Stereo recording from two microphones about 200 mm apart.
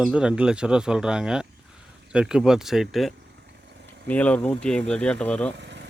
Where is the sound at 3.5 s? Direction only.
60° right (ahead or behind).